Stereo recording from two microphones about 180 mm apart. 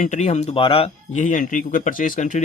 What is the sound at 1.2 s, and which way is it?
Speech, 45° left (ahead or behind).